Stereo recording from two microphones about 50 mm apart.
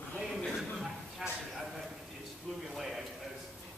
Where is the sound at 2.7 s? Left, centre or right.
Centre.